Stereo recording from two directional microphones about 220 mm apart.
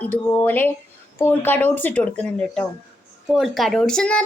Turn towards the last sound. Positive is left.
turn(degrees=5)  # may be behind; listen again after turning